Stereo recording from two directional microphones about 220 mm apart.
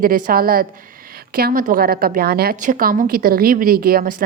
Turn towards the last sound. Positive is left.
turn(degrees=-40)  # may be behind; listen again after turning